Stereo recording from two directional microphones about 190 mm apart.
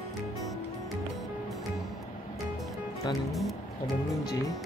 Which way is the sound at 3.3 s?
Centre (ahead or behind).